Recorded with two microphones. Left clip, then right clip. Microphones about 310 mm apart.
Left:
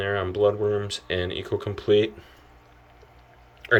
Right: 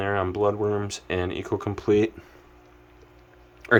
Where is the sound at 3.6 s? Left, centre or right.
Centre.